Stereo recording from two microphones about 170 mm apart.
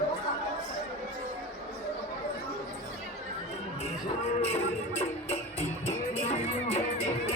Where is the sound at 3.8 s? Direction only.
40° left (ahead or behind).